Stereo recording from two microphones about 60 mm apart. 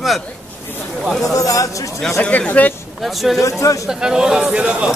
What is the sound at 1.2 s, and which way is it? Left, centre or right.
Speech, left.